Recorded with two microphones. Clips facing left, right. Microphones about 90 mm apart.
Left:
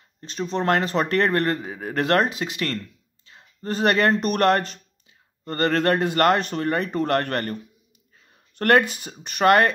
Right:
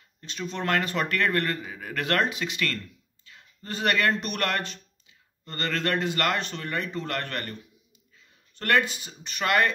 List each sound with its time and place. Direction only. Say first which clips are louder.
0.2 s a man's voice: left 6 dB; 35° left (ahead or behind)
7.0 s speech: left 9 dB; 50° left (ahead or behind)